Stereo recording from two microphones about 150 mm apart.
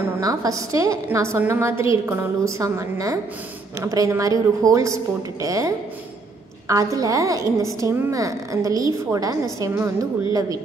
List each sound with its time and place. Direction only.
0.2 s a woman's voice: 25° right (ahead or behind)